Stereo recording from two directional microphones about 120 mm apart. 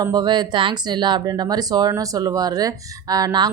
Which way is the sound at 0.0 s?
35° right (ahead or behind).